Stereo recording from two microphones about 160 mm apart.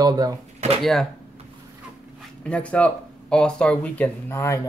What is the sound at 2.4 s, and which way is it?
Speech, 10° left (ahead or behind).